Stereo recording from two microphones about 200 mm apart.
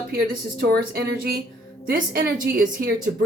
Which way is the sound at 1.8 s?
45° right (ahead or behind).